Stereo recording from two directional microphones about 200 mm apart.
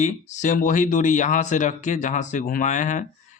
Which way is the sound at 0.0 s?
40° left (ahead or behind).